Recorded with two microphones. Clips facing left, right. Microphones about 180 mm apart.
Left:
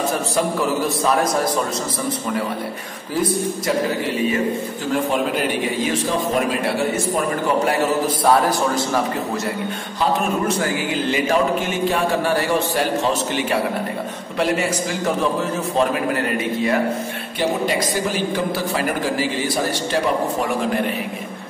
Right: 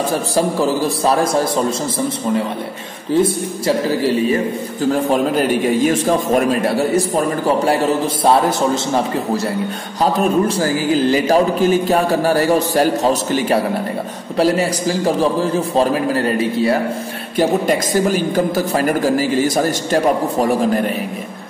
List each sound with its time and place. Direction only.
0.4 s a man's voice: 30° right (ahead or behind)
3.2 s a man's voice: 30° right (ahead or behind)
10.5 s a man's voice: 35° right (ahead or behind)
17.4 s a woman's voice: 45° right (ahead or behind)